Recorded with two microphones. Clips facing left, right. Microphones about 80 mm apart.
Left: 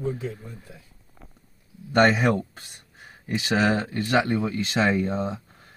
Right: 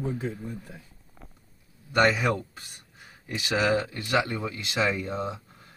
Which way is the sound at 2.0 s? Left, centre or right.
Left.